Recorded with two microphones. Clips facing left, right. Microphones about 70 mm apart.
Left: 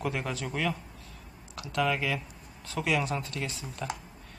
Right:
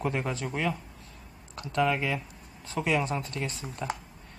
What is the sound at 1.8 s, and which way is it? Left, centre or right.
Speech, centre.